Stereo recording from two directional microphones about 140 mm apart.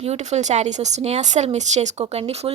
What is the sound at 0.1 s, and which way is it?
Speech, 55° right (ahead or behind).